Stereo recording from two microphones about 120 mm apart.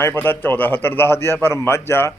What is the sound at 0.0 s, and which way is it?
A man's voice, 20° left (ahead or behind).